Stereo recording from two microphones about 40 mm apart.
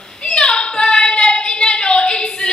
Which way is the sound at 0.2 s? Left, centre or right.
Left.